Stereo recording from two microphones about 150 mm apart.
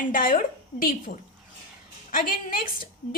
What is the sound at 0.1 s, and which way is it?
A woman's voice, 65° left (ahead or behind).